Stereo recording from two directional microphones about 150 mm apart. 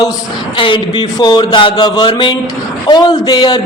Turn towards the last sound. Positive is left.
turn(degrees=30)  # may be behind; listen again after turning